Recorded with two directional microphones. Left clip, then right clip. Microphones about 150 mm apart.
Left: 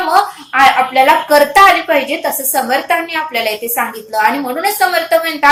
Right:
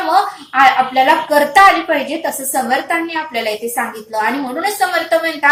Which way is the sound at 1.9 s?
25° left (ahead or behind).